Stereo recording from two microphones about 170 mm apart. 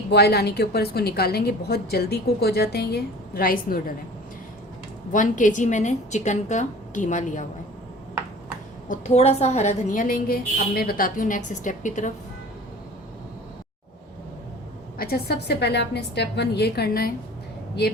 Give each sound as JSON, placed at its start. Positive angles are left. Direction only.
{"t": 0.1, "sound": "a woman's voice", "side_deg": 70}
{"t": 5.1, "sound": "a woman's voice", "side_deg": 50}
{"t": 8.9, "sound": "a woman's voice", "side_deg": 40}
{"t": 14.9, "sound": "a woman's voice", "side_deg": 65}